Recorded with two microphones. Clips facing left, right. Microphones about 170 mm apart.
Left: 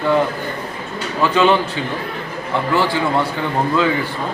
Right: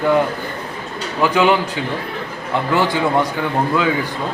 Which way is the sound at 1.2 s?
15° right (ahead or behind).